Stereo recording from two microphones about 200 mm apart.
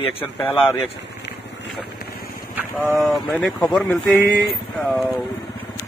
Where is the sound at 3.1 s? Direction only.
Centre (ahead or behind).